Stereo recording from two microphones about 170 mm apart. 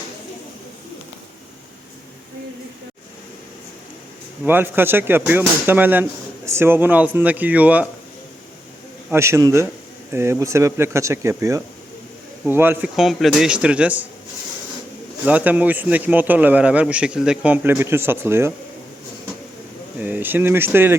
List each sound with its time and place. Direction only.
4.4 s a man's voice: 10° right (ahead or behind)
9.0 s a man's voice: 15° right (ahead or behind)
13.0 s speech: centre (ahead or behind)
15.3 s a man's voice: 10° right (ahead or behind)
20.0 s speech: 10° right (ahead or behind)